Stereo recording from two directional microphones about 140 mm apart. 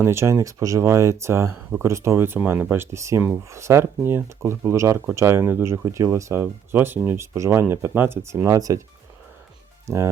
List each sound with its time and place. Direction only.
0.0 s speech: 20° right (ahead or behind)
9.8 s speech: 20° right (ahead or behind)